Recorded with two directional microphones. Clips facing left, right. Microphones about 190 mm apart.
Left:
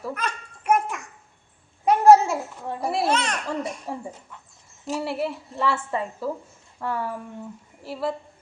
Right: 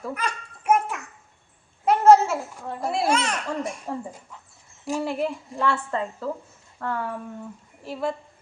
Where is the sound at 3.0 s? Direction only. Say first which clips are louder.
Even; 10° right (ahead or behind).